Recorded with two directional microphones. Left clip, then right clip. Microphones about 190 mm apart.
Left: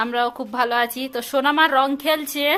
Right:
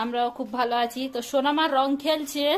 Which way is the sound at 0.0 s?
10° left (ahead or behind).